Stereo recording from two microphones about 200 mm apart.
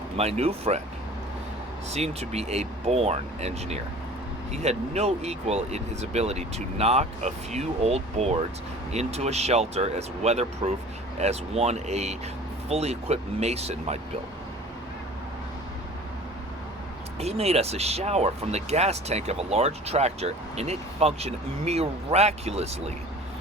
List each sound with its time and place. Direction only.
0.2 s speech: 30° right (ahead or behind)
1.9 s speech: 30° right (ahead or behind)
17.2 s speech: 30° right (ahead or behind)